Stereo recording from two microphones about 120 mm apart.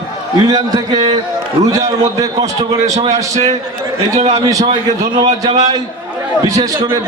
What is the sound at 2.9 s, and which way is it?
Speech, 75° right (ahead or behind).